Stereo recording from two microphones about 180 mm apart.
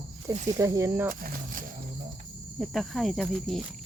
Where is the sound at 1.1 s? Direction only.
50° right (ahead or behind).